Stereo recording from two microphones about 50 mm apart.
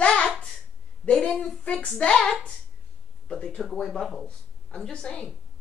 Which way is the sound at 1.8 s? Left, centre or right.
Left.